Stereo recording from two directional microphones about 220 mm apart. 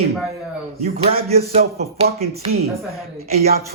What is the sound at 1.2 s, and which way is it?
A man's voice, 30° right (ahead or behind).